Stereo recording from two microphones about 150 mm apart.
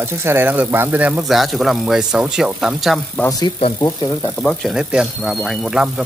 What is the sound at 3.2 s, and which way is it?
Speech, 25° left (ahead or behind).